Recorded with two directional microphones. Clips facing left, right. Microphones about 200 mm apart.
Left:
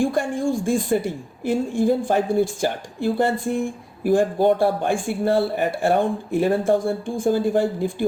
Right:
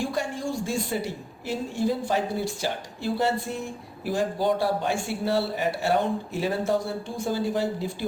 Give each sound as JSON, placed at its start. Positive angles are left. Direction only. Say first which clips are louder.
{"t": 0.0, "sound": "a woman's voice", "louder": "left 7 dB", "side_deg": 50}